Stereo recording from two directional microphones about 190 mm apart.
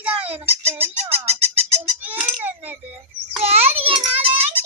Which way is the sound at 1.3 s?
35° right (ahead or behind).